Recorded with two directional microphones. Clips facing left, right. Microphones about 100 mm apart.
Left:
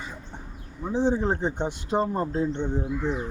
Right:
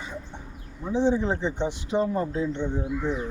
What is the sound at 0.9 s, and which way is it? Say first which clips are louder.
Speech: right 1 dB; 45° left (ahead or behind).